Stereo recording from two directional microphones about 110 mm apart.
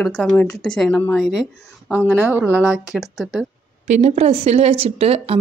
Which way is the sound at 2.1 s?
20° right (ahead or behind).